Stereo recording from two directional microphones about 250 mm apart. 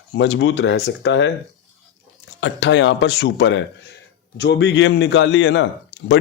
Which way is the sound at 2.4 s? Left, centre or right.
Left.